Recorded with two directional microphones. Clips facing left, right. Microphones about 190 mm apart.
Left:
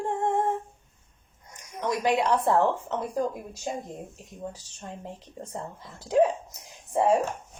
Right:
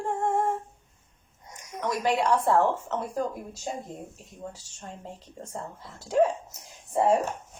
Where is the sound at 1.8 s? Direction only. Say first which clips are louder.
Left 1 dB; 20° left (ahead or behind).